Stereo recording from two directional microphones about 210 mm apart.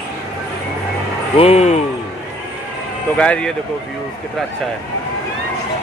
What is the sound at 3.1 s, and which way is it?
Speech, 5° left (ahead or behind).